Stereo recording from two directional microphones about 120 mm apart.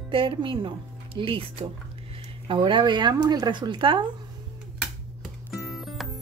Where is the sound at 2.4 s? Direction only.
40° right (ahead or behind).